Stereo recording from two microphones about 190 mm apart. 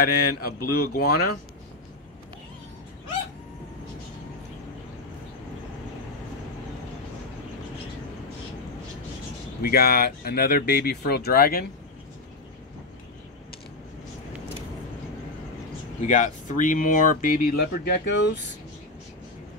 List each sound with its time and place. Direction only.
0.0 s speech: 55° left (ahead or behind)
9.6 s speech: 55° left (ahead or behind)
16.1 s speech: 40° left (ahead or behind); by 18.4 s 65° left (ahead or behind)